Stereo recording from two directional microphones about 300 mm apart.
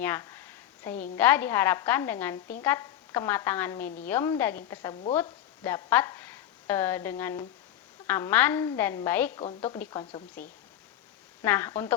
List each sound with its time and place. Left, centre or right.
0.0 s a sound: centre
1.1 s a woman's voice: centre; by 10.5 s left
11.4 s a woman's voice: centre